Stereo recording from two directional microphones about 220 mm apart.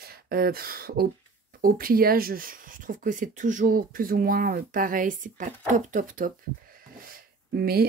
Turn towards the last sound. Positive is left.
turn(degrees=-45)  # may be behind; listen again after turning